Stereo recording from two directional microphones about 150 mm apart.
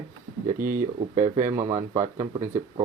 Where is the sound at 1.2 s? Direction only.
50° right (ahead or behind).